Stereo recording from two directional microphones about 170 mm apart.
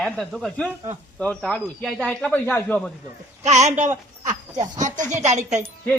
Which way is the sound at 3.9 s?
20° right (ahead or behind).